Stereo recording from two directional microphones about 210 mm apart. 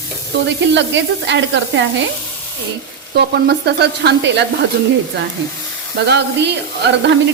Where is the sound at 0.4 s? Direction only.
55° right (ahead or behind).